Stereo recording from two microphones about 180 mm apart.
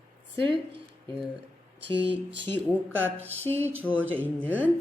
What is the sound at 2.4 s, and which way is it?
Speech, 10° left (ahead or behind).